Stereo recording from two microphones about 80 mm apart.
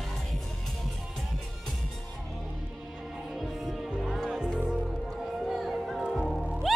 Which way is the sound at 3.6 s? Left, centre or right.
Centre.